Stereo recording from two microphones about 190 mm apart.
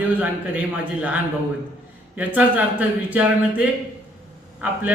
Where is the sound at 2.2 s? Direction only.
10° right (ahead or behind).